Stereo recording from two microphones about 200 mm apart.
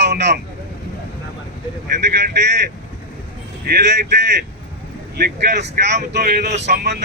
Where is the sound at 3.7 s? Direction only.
55° right (ahead or behind).